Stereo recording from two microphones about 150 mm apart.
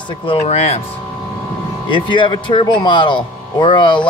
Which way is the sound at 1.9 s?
35° left (ahead or behind).